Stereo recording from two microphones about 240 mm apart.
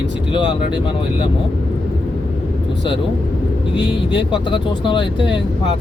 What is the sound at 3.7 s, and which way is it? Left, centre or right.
Speech, centre.